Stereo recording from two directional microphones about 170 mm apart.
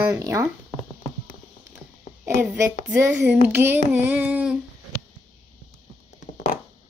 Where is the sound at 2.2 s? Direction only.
15° right (ahead or behind).